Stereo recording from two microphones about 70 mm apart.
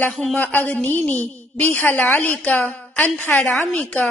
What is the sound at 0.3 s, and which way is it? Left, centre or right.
A woman's voice, left.